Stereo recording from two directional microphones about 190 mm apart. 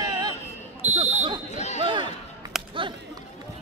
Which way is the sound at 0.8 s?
40° right (ahead or behind).